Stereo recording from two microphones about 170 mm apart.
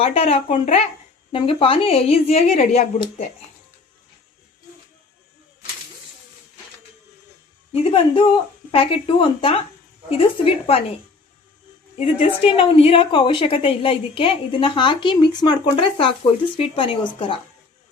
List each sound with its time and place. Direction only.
0.0 s a woman's voice: 35° left (ahead or behind)
7.7 s a woman's voice: 35° left (ahead or behind)
11.9 s a woman's voice: 35° left (ahead or behind)